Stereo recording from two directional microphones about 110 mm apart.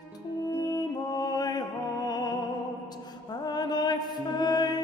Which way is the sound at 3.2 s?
40° left (ahead or behind).